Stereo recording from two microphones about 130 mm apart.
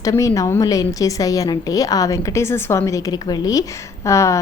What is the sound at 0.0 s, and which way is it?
A woman's voice, 25° left (ahead or behind).